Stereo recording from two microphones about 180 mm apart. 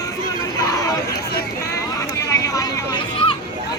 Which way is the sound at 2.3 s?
15° left (ahead or behind).